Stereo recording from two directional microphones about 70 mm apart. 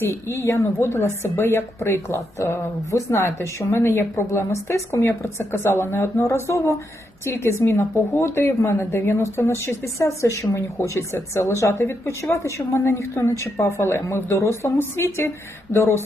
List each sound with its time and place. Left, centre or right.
0.3 s speech: left